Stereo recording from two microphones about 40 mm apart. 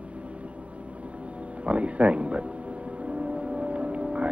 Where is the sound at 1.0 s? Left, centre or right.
Right.